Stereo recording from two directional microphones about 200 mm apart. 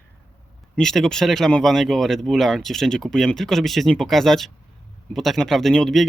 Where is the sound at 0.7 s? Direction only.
5° left (ahead or behind).